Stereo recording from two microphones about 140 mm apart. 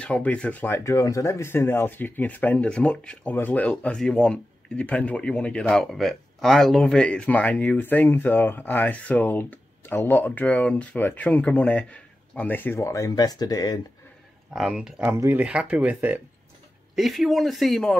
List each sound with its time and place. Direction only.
0.0 s speech: 10° left (ahead or behind); by 13.7 s 30° left (ahead or behind)
14.5 s speech: 5° right (ahead or behind)